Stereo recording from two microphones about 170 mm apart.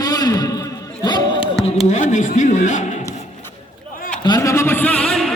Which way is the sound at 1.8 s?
45° left (ahead or behind).